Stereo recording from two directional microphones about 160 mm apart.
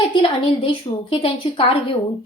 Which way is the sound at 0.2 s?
30° left (ahead or behind).